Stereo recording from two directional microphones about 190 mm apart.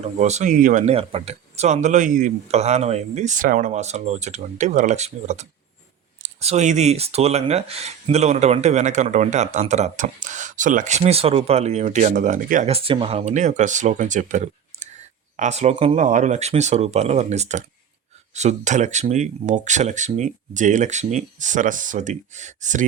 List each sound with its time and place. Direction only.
0.2 s speech: 35° right (ahead or behind)